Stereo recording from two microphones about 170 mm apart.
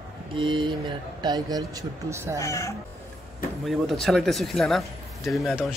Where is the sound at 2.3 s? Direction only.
20° left (ahead or behind).